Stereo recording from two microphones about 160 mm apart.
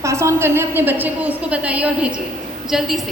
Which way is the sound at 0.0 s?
20° right (ahead or behind).